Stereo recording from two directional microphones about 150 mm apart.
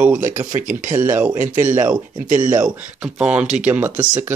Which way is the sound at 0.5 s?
60° right (ahead or behind).